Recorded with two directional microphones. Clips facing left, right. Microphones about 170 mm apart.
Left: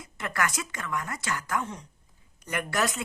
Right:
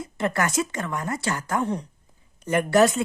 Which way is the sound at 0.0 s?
30° right (ahead or behind).